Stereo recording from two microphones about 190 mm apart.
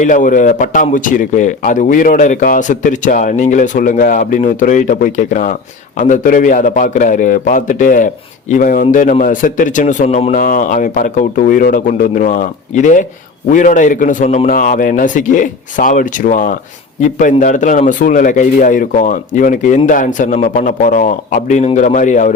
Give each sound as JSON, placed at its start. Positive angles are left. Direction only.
{"t": 0.0, "sound": "a man's voice", "side_deg": 45}
{"t": 10.4, "sound": "a man's voice", "side_deg": 45}